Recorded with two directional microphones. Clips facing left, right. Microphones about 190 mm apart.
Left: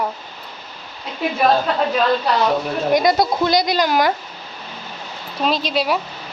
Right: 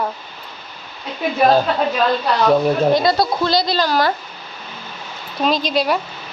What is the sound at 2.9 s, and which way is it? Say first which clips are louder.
Speech: even; 15° left (ahead or behind).